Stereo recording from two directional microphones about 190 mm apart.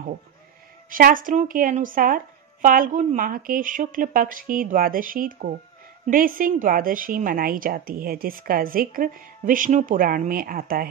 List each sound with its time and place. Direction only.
0.8 s a woman's voice: 45° right (ahead or behind)